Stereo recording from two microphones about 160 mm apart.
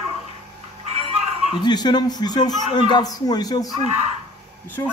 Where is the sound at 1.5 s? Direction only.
25° left (ahead or behind).